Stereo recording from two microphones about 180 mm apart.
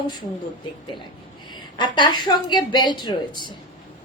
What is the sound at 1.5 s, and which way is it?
A woman's voice, 25° left (ahead or behind).